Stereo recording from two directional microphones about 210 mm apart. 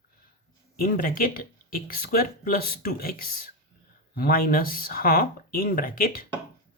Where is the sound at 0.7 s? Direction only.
45° left (ahead or behind).